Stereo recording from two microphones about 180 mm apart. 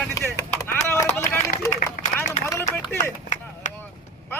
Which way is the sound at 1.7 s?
50° left (ahead or behind).